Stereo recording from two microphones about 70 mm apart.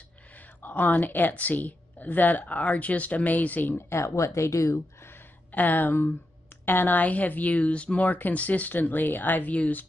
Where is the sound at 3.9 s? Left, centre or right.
Left.